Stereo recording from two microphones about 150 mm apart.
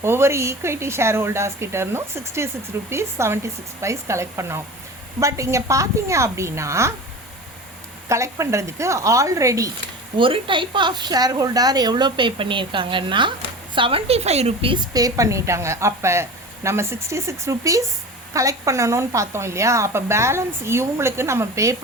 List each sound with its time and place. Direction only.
0.0 s speech: 15° right (ahead or behind)
8.1 s speech: 20° right (ahead or behind)
10.2 s a woman's voice: 35° right (ahead or behind); by 21.8 s 20° right (ahead or behind)